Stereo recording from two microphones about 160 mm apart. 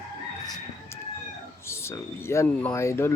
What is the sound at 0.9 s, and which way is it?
Chicken, 15° left (ahead or behind).